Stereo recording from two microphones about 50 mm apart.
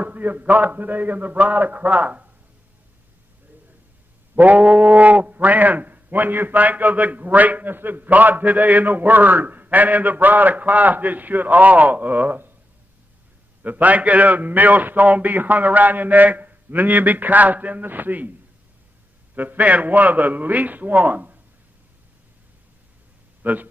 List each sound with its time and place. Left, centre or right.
0.0 s speech: right
4.4 s speech: right
13.6 s speech: right
19.3 s speech: right
23.4 s speech: right